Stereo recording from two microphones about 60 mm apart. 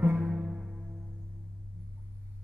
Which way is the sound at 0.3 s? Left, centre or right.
Centre.